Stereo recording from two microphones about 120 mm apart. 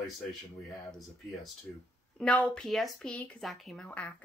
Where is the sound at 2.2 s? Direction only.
10° left (ahead or behind).